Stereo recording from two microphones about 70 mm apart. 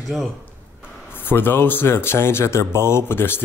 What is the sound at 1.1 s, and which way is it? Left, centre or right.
Speech, left.